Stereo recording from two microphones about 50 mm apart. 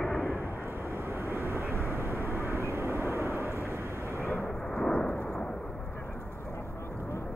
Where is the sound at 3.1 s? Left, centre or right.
Left.